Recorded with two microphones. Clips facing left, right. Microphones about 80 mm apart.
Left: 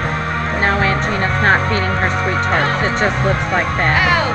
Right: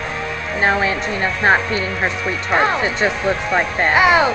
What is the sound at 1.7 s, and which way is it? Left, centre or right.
Speech, left.